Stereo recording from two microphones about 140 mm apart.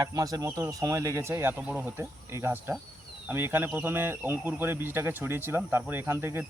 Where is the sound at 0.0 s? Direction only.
25° right (ahead or behind).